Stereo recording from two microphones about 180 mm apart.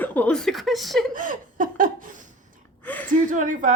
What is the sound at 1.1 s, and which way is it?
Laughter, 50° right (ahead or behind).